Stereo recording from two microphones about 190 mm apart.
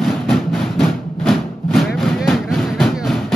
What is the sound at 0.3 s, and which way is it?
Music, centre (ahead or behind).